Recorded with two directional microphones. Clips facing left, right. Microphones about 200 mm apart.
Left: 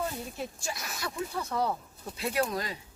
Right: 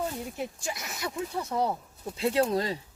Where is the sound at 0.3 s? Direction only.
20° right (ahead or behind).